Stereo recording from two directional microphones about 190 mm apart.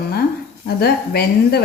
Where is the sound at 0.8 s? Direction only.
55° left (ahead or behind).